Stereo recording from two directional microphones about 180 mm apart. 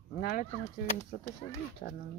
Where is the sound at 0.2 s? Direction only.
50° left (ahead or behind).